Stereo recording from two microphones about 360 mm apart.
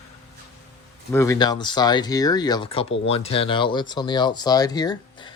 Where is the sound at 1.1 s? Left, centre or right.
Centre.